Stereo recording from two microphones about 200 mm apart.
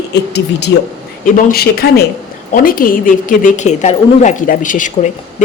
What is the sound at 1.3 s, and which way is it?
A woman's voice, 45° left (ahead or behind).